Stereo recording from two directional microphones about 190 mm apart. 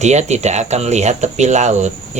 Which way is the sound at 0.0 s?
35° right (ahead or behind).